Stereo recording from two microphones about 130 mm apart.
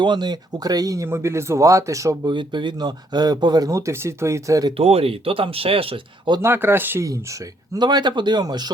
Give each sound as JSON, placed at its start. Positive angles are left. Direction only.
{"t": 0.0, "sound": "speech", "side_deg": -35}
{"t": 2.3, "sound": "speech", "side_deg": -35}
{"t": 4.8, "sound": "speech", "side_deg": -50}
{"t": 6.4, "sound": "speech", "side_deg": -15}